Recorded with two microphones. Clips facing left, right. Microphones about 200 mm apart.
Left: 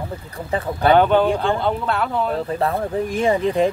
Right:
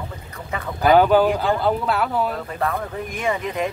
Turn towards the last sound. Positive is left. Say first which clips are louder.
# left 6 dB
turn(degrees=30)  # may be behind; listen again after turning